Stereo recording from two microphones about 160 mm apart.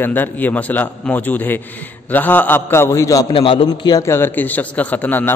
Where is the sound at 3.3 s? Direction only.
35° left (ahead or behind); by 5.3 s 10° left (ahead or behind).